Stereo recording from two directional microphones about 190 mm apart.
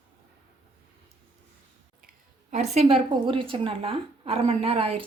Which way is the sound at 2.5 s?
35° right (ahead or behind).